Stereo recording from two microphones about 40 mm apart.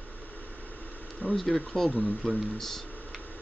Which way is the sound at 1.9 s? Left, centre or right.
Left.